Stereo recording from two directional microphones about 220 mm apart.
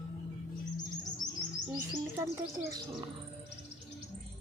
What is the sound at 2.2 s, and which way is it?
Bird, 10° right (ahead or behind).